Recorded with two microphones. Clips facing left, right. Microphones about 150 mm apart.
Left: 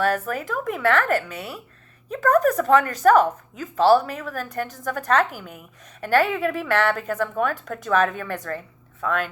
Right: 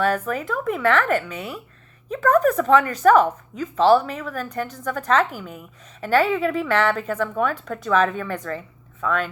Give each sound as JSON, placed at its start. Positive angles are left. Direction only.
{"t": 0.0, "sound": "a woman's voice", "side_deg": 45}